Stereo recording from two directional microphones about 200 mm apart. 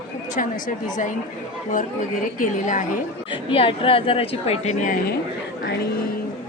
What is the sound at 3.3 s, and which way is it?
A woman's voice, 25° left (ahead or behind).